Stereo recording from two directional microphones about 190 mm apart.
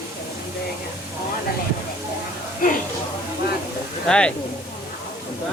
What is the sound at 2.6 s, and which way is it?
Speech, 45° left (ahead or behind).